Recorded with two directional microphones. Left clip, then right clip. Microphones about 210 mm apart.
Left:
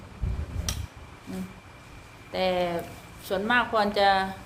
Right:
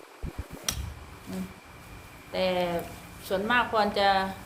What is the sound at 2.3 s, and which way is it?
A woman's voice, 20° left (ahead or behind).